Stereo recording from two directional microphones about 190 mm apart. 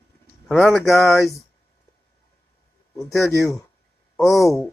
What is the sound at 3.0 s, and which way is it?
Speech, 15° left (ahead or behind).